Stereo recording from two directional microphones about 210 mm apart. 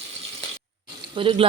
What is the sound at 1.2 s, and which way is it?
Speech, 25° right (ahead or behind).